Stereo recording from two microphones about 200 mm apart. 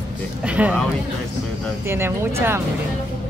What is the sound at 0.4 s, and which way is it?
Speech, 5° right (ahead or behind).